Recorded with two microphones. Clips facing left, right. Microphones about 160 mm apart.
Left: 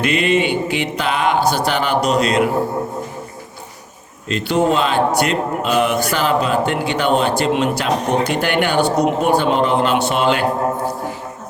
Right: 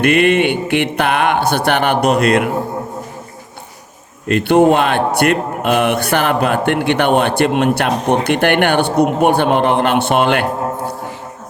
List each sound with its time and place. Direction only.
0.0 s a man's voice: 55° right (ahead or behind)
4.3 s a man's voice: 55° right (ahead or behind)